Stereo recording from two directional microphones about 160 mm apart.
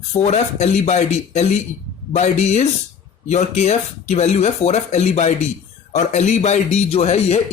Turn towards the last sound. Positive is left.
turn(degrees=40)  # may be behind; listen again after turning